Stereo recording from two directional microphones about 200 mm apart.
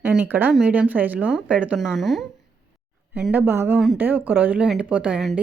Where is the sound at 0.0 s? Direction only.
10° right (ahead or behind).